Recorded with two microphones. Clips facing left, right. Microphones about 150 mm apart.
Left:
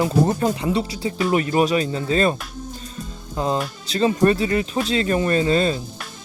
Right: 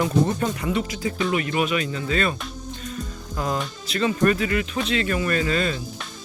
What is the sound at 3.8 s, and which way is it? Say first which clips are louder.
Speech: left 3 dB; 30° left (ahead or behind).